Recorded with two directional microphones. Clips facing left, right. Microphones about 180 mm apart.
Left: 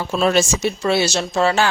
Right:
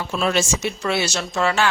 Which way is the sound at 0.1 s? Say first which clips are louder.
Left 4 dB; 40° left (ahead or behind).